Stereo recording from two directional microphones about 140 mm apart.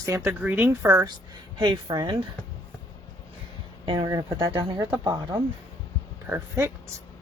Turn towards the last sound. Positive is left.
turn(degrees=-20)  # may be behind; listen again after turning